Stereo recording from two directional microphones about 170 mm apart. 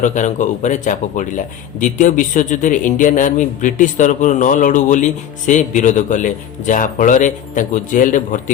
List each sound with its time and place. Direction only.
0.0 s a man's voice: 45° left (ahead or behind)